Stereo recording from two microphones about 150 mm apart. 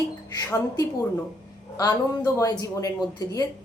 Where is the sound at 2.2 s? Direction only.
20° left (ahead or behind).